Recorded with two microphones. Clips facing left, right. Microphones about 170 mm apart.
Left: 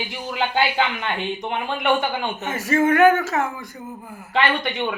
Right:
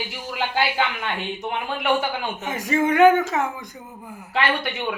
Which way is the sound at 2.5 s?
15° right (ahead or behind).